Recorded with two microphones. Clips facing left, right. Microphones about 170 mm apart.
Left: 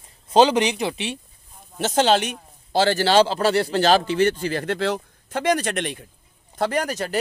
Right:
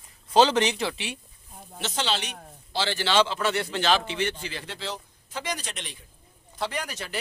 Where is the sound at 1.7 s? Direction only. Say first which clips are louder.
Left 11 dB; 50° left (ahead or behind).